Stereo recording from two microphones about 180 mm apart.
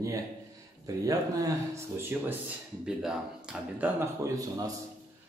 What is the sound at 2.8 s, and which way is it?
Speech, 5° right (ahead or behind).